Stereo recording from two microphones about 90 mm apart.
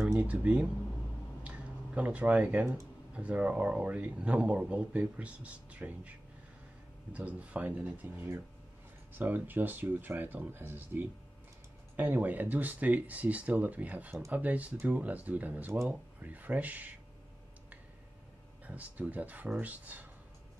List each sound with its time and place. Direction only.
0.2 s speech: 15° right (ahead or behind)
1.4 s a sound: 15° right (ahead or behind)
3.2 s speech: 15° right (ahead or behind)
18.7 s speech: 15° right (ahead or behind)